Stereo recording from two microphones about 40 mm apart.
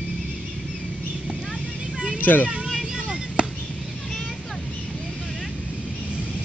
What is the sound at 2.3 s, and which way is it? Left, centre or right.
Speech, left.